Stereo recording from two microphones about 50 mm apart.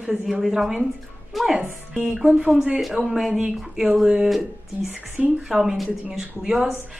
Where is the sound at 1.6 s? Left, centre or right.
Centre.